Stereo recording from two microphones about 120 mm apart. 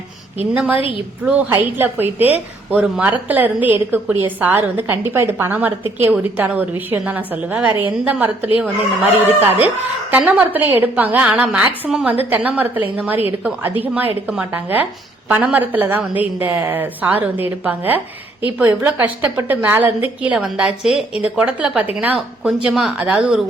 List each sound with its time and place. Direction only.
0.5 s a woman's voice: 10° right (ahead or behind)